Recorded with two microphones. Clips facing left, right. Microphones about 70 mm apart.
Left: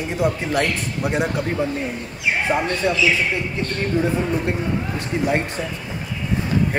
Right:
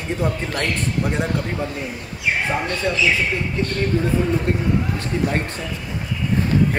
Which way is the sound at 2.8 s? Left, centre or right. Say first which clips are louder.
Left 1 dB; centre.